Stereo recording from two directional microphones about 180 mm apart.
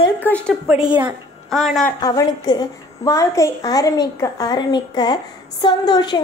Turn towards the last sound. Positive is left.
turn(degrees=25)  # may be behind; listen again after turning